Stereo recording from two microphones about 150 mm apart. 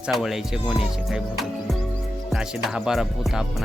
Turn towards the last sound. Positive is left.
turn(degrees=-5)  # may be behind; listen again after turning